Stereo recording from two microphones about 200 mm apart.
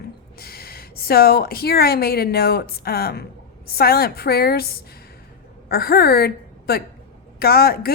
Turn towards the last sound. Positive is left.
turn(degrees=50)  # may be behind; listen again after turning